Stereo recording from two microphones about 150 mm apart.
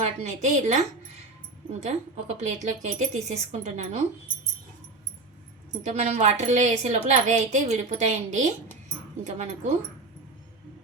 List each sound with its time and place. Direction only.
0.0 s a woman's voice: 50° right (ahead or behind)
1.8 s a woman's voice: 50° right (ahead or behind)
5.7 s a woman's voice: 50° right (ahead or behind)